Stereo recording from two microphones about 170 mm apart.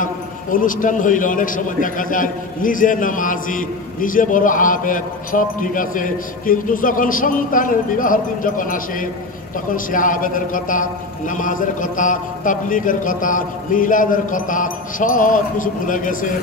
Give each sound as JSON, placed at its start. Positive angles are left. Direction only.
{"t": 0.0, "sound": "a man's voice", "side_deg": 50}